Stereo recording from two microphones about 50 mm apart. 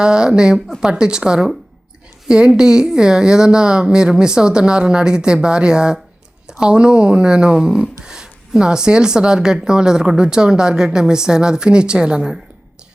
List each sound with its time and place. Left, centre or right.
0.0 s speech: centre